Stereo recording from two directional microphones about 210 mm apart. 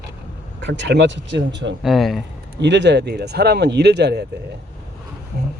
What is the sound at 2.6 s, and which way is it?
Speech, 55° right (ahead or behind).